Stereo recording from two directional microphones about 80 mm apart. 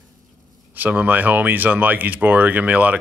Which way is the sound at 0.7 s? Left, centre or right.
Right.